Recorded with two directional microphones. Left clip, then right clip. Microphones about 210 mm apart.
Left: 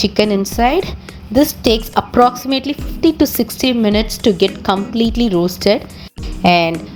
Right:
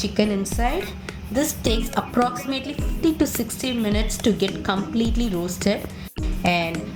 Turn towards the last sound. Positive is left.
turn(degrees=35)  # may be behind; listen again after turning